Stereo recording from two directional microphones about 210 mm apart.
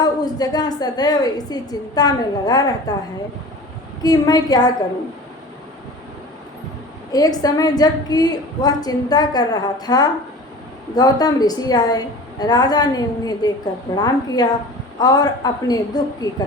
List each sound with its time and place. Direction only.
0.0 s a woman's voice: 20° left (ahead or behind)
4.0 s a woman's voice: 20° left (ahead or behind)
7.1 s a woman's voice: 20° left (ahead or behind)